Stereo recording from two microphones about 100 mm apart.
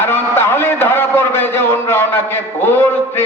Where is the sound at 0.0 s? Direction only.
25° left (ahead or behind).